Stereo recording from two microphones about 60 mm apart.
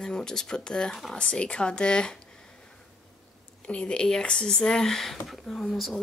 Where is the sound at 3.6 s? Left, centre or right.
Centre.